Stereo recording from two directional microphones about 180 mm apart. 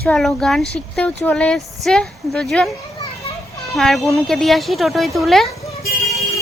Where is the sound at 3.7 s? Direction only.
Centre (ahead or behind).